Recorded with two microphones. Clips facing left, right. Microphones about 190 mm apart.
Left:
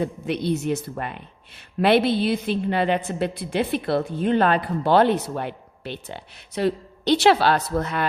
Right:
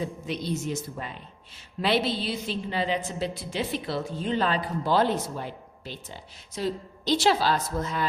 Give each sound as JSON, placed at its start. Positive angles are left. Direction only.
{"t": 0.0, "sound": "a woman's voice", "side_deg": 60}